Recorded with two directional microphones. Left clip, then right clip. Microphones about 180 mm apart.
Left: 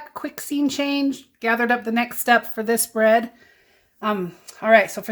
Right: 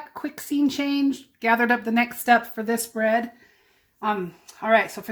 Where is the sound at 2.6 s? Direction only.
35° left (ahead or behind).